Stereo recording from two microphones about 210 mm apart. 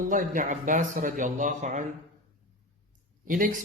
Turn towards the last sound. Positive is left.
turn(degrees=-40)  # may be behind; listen again after turning